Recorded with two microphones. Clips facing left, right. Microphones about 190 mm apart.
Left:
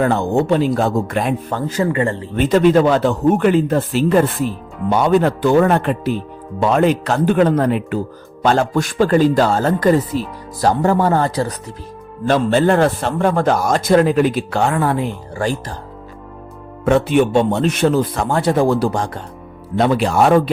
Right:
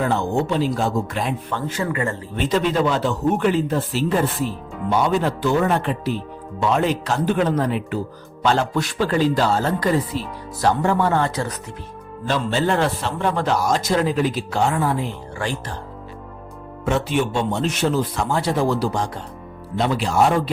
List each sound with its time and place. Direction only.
0.0 s speech: 55° left (ahead or behind); by 2.2 s 30° left (ahead or behind)
2.3 s speech: 50° left (ahead or behind)
12.2 s speech: 55° left (ahead or behind)
16.8 s speech: 55° left (ahead or behind)